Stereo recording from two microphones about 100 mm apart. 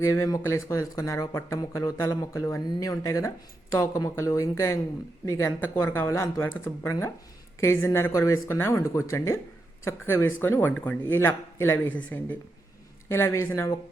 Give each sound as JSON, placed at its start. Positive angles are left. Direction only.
{"t": 0.3, "sound": "speech", "side_deg": 30}